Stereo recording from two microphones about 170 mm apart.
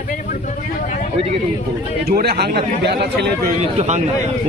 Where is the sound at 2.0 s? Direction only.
70° right (ahead or behind).